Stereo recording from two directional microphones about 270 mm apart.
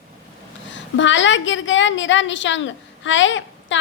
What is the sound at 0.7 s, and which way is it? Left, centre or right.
A woman's voice, left.